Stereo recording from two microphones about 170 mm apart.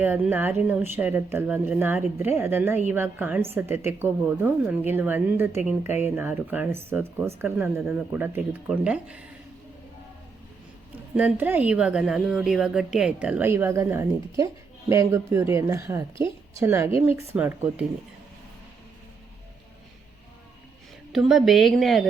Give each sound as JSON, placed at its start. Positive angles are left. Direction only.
{"t": 0.0, "sound": "speech", "side_deg": -10}
{"t": 11.1, "sound": "speech", "side_deg": -5}
{"t": 21.1, "sound": "a woman's voice", "side_deg": 0}